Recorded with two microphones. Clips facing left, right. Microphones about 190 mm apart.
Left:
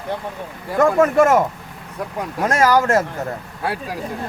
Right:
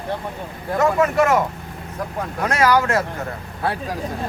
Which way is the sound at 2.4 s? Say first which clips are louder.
Left 2 dB; 45° left (ahead or behind).